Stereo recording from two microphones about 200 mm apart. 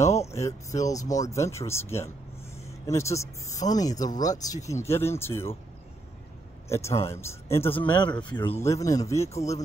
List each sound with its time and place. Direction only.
0.3 s speech: 15° left (ahead or behind)
6.7 s speech: 15° left (ahead or behind)
8.5 s speech: 15° left (ahead or behind)